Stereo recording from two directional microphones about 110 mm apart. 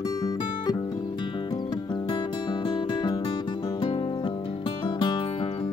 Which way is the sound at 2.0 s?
45° left (ahead or behind).